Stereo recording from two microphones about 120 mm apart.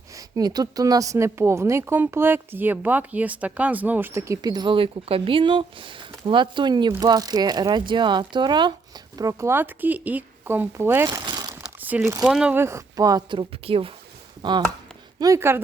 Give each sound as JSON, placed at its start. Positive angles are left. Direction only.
{"t": 0.2, "sound": "a woman's voice", "side_deg": -30}
{"t": 4.4, "sound": "speech", "side_deg": -35}
{"t": 9.1, "sound": "speech", "side_deg": -25}
{"t": 11.3, "sound": "a sound", "side_deg": -35}
{"t": 11.6, "sound": "a sound", "side_deg": -10}
{"t": 12.2, "sound": "speech", "side_deg": -5}
{"t": 12.5, "sound": "speech", "side_deg": -25}
{"t": 14.4, "sound": "speech", "side_deg": -35}
{"t": 15.2, "sound": "a woman's voice", "side_deg": -25}